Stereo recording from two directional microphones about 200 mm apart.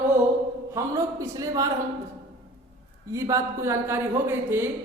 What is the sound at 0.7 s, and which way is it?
Speech, 15° right (ahead or behind).